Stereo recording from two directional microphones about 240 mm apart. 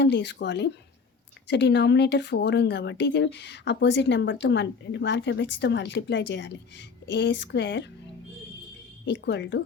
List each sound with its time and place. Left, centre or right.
0.0 s speech: left
9.0 s speech: left